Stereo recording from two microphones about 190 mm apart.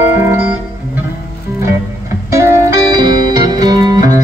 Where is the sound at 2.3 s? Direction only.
15° right (ahead or behind).